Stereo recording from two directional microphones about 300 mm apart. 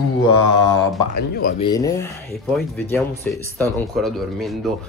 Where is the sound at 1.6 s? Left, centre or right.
Centre.